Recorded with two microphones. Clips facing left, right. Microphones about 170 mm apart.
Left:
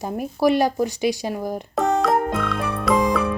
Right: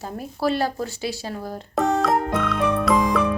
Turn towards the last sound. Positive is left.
turn(degrees=0)  # may be behind; listen again after turning